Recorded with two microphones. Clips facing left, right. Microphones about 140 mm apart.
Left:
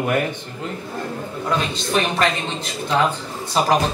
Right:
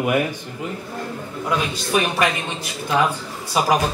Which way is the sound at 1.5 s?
10° right (ahead or behind).